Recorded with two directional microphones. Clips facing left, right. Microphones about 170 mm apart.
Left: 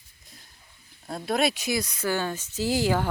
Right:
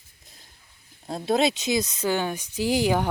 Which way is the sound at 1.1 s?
25° right (ahead or behind).